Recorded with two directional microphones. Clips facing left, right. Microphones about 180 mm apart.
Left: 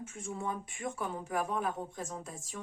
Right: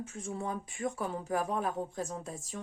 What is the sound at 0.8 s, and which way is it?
Speech, 35° right (ahead or behind).